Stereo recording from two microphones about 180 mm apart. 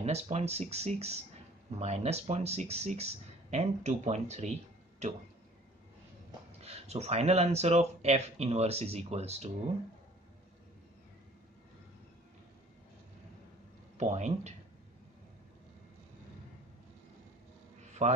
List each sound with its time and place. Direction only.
0.0 s speech: 35° right (ahead or behind)
6.6 s speech: 35° right (ahead or behind)
13.9 s speech: 40° right (ahead or behind)
18.0 s speech: 40° right (ahead or behind)